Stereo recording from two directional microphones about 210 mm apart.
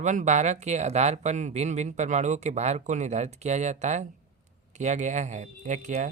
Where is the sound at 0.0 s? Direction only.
35° right (ahead or behind).